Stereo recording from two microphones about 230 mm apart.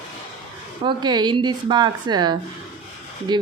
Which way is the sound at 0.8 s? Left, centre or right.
Centre.